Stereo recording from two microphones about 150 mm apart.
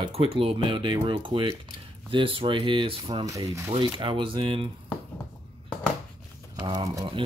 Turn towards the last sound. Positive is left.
turn(degrees=-30)  # may be behind; listen again after turning